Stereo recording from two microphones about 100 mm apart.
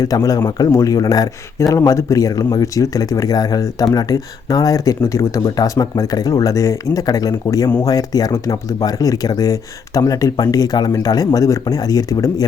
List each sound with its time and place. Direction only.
0.0 s a man's voice: 35° left (ahead or behind)